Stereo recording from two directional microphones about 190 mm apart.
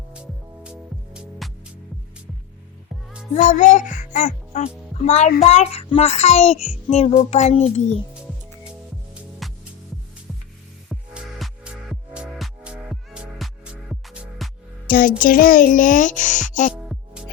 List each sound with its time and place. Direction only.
0.1 s music: 5° right (ahead or behind)
3.3 s a child's voice: 40° left (ahead or behind)
9.4 s music: centre (ahead or behind)
10.8 s music: centre (ahead or behind)
14.8 s a sound: 50° left (ahead or behind)
15.2 s speech: 45° left (ahead or behind)
16.7 s music: 5° right (ahead or behind)